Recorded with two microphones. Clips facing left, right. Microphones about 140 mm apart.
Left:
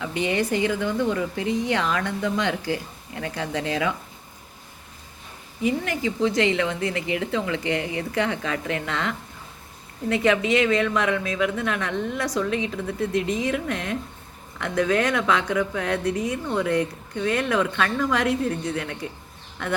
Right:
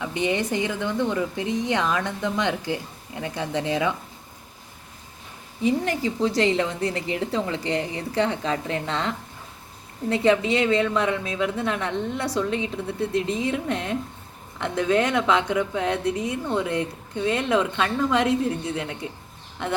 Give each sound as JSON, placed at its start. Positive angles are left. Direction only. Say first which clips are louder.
{"t": 0.0, "sound": "a woman's voice", "louder": "even", "side_deg": -20}
{"t": 5.8, "sound": "a woman's voice", "louder": "even", "side_deg": -35}